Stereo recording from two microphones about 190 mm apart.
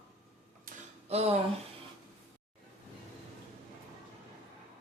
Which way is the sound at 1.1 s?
35° right (ahead or behind).